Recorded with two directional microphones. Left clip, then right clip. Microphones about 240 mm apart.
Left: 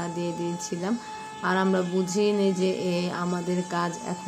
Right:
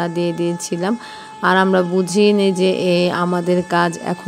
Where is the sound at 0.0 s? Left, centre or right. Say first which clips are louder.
Right 11 dB; right.